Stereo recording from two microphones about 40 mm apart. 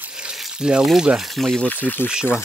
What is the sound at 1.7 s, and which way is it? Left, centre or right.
Speech, left.